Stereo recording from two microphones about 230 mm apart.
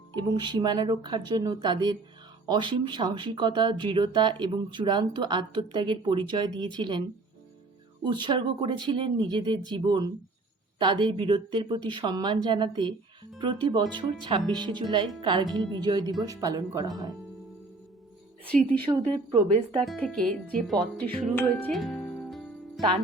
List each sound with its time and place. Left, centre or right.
0.1 s speech: centre
8.0 s speech: centre
18.4 s speech: centre
18.9 s speech: centre
19.8 s speech: centre